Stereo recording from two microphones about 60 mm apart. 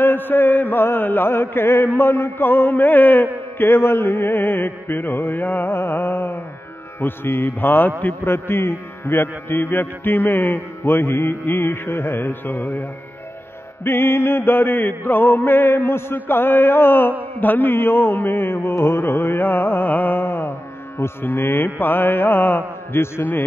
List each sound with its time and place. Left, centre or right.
0.0 s mantra: left
13.8 s mantra: left